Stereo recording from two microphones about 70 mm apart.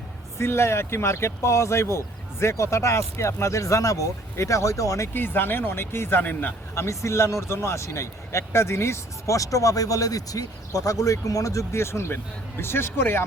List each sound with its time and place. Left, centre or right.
0.3 s speech: left
5.1 s speech: left
6.7 s speech: left